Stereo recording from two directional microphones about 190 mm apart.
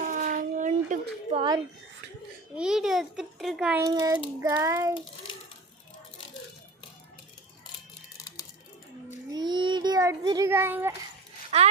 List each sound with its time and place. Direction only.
0.0 s a sound: 45° right (ahead or behind); by 1.6 s 25° right (ahead or behind)
2.6 s a child's voice: 5° right (ahead or behind)
3.8 s a child's voice: 20° right (ahead or behind)
4.4 s child singing: 15° right (ahead or behind)
9.3 s child singing: 25° right (ahead or behind)
11.5 s speech: 35° right (ahead or behind)